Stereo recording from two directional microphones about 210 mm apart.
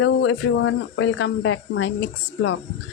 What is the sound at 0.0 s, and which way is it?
Speech, 65° left (ahead or behind).